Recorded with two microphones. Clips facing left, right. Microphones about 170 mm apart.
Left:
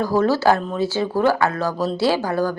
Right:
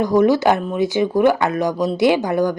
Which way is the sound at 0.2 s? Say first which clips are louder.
Right 2 dB; 15° right (ahead or behind).